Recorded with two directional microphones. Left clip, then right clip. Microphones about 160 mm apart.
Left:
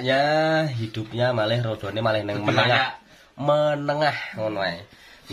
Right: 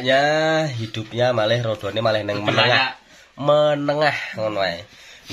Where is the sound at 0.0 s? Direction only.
30° right (ahead or behind).